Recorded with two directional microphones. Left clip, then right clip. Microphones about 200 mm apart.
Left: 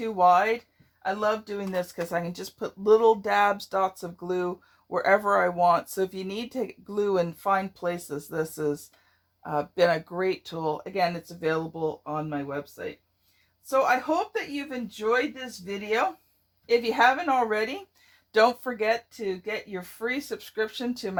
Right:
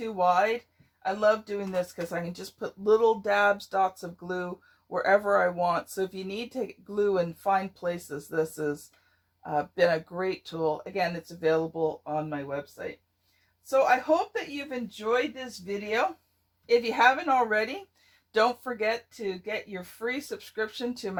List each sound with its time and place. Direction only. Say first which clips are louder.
0.0 s speech: left 4 dB; 35° left (ahead or behind)
16.6 s speech: left 1 dB; 30° left (ahead or behind)